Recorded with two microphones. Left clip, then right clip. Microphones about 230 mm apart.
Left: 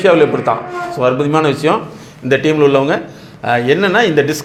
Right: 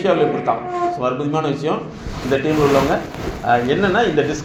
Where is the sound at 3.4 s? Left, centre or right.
Left.